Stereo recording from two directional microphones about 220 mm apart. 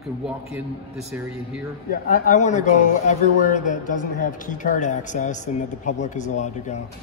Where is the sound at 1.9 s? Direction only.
40° left (ahead or behind).